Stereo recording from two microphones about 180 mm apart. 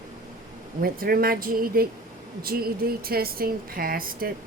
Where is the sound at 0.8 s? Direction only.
55° right (ahead or behind).